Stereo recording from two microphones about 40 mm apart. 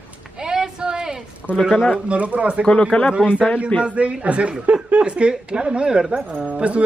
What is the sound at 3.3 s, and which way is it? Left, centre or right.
Speech, left.